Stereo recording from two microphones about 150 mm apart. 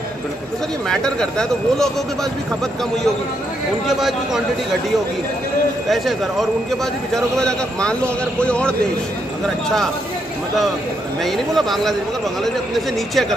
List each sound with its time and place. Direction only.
0.8 s speech: 5° left (ahead or behind)
3.8 s speech: centre (ahead or behind)
7.3 s a man's voice: 5° left (ahead or behind)
11.2 s speech: centre (ahead or behind)